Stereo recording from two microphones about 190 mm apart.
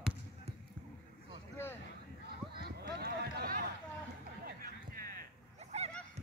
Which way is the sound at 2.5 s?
55° right (ahead or behind).